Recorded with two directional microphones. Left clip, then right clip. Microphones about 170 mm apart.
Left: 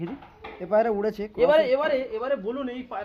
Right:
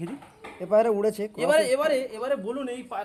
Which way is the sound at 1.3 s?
20° left (ahead or behind).